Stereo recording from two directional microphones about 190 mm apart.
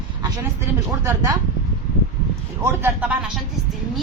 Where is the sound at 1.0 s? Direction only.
15° right (ahead or behind).